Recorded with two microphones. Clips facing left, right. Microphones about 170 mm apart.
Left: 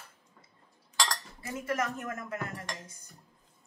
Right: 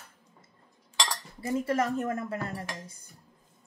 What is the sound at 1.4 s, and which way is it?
Speech, 30° right (ahead or behind).